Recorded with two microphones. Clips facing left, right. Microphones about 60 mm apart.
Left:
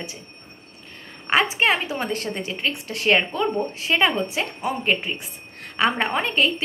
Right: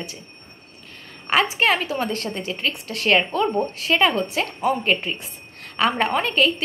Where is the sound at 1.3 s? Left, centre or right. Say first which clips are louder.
Even; left.